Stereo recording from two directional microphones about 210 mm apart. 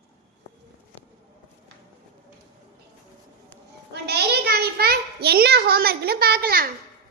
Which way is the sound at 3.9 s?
50° right (ahead or behind).